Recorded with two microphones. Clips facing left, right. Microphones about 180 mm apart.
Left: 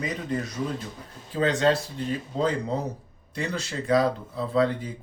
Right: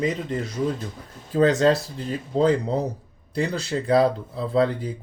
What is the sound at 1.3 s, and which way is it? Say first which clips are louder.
Speech: right 4 dB; 40° right (ahead or behind).